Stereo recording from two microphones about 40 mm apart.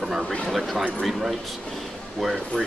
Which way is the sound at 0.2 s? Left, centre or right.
Left.